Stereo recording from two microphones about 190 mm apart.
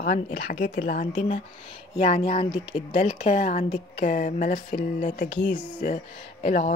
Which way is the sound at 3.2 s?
40° left (ahead or behind).